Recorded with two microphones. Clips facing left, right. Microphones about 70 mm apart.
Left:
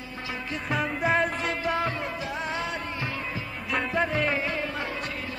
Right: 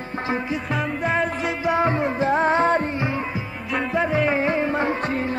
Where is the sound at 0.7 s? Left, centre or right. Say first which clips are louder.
Left 1 dB; centre.